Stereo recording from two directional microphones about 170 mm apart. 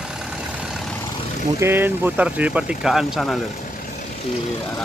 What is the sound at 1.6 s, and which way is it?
Speech, 10° right (ahead or behind).